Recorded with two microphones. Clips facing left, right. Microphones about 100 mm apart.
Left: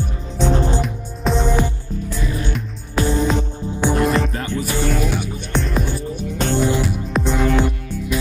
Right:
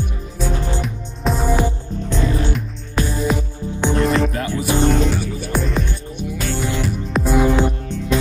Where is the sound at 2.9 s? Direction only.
25° left (ahead or behind).